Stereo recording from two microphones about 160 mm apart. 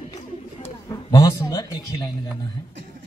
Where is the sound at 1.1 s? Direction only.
20° left (ahead or behind).